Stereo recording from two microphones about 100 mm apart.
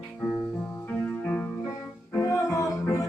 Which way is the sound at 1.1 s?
15° left (ahead or behind).